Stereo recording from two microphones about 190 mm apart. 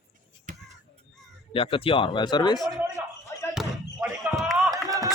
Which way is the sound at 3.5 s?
Centre (ahead or behind).